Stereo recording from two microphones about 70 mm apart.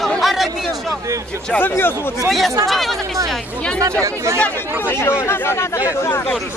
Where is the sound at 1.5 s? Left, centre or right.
Left.